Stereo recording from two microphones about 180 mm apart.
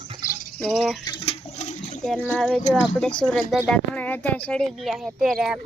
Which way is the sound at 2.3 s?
Centre (ahead or behind).